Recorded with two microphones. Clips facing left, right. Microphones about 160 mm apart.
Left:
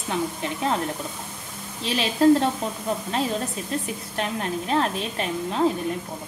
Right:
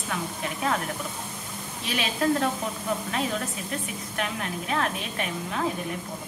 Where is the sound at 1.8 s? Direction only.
30° left (ahead or behind).